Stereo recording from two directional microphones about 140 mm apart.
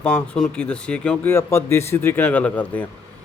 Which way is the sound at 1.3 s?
20° left (ahead or behind).